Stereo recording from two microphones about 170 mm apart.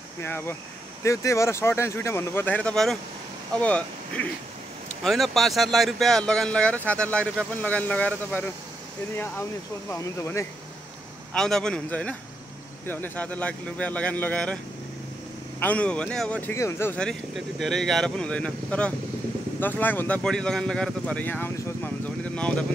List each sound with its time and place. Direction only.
0.2 s speech: 15° left (ahead or behind)
11.3 s speech: 5° left (ahead or behind)
15.6 s speech: 10° left (ahead or behind)